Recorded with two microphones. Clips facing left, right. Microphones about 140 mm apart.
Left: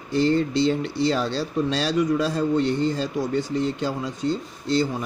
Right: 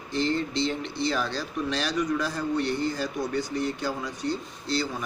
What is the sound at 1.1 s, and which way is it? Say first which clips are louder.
Speech: left 5 dB; 30° left (ahead or behind).